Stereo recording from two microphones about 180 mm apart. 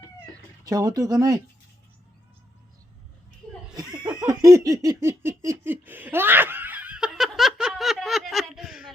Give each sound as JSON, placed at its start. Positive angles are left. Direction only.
{"t": 0.6, "sound": "speech", "side_deg": -20}
{"t": 3.8, "sound": "laughter", "side_deg": -20}